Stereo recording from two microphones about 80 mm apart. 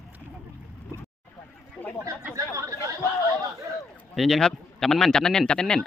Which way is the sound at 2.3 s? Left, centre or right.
Right.